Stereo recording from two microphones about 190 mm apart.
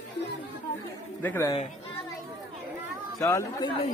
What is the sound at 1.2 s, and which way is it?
Speech, 15° left (ahead or behind).